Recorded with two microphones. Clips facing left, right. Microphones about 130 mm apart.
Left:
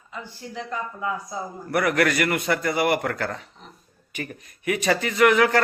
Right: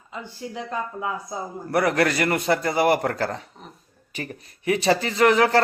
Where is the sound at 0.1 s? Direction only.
25° right (ahead or behind).